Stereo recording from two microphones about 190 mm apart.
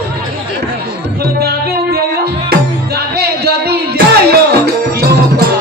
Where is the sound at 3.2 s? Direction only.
60° right (ahead or behind).